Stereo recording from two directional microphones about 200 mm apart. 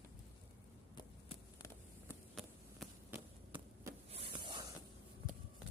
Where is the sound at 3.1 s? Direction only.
10° right (ahead or behind).